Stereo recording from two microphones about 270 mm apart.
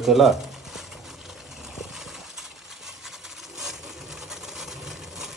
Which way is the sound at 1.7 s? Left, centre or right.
Centre.